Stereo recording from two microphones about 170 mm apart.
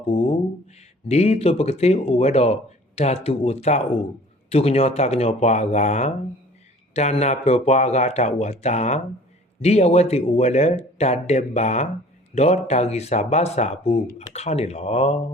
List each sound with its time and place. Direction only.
0.1 s speech: 35° left (ahead or behind)